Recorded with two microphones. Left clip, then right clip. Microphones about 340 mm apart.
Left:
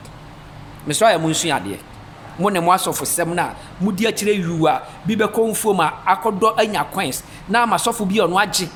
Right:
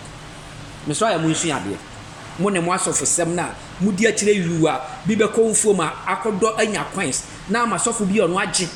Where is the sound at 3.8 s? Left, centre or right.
Left.